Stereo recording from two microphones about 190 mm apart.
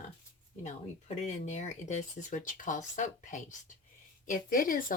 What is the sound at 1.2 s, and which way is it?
Speech, 40° left (ahead or behind).